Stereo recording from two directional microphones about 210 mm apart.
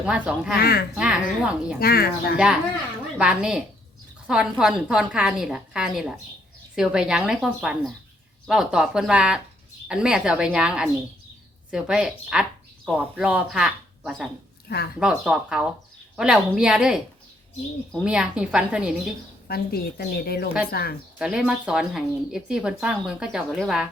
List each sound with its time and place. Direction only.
0.0 s speech: 5° right (ahead or behind)
0.6 s a woman's voice: 50° left (ahead or behind)
0.9 s speech: 5° right (ahead or behind)
1.8 s a woman's voice: 45° left (ahead or behind)
3.2 s speech: 5° right (ahead or behind)
19.5 s a woman's voice: 45° left (ahead or behind)
21.2 s speech: 5° right (ahead or behind)